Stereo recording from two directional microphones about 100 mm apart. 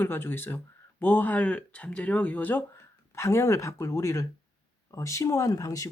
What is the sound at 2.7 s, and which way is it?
Speech, 30° left (ahead or behind).